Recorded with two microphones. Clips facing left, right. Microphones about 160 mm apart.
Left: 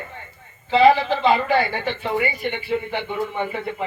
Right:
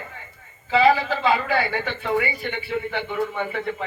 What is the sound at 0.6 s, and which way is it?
A man's voice, 20° left (ahead or behind).